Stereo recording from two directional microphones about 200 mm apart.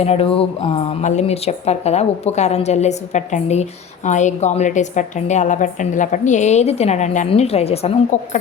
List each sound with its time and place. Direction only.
0.0 s a woman's voice: 30° left (ahead or behind)